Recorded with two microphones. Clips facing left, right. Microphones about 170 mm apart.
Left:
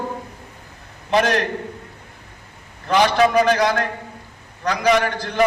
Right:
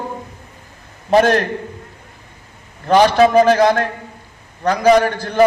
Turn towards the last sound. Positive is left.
turn(degrees=-45)  # may be behind; listen again after turning